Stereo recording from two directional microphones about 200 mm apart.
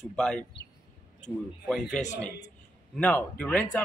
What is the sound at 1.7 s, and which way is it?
Speech, centre (ahead or behind).